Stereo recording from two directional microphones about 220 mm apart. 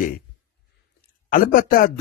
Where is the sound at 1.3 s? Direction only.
40° left (ahead or behind).